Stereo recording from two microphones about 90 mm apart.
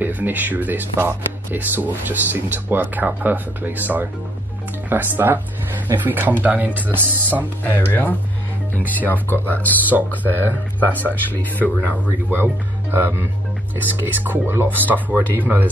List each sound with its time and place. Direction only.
0.0 s speech: 20° right (ahead or behind)
7.6 s speech: 20° left (ahead or behind)
10.9 s speech: 20° left (ahead or behind)
11.9 s speech: 20° right (ahead or behind)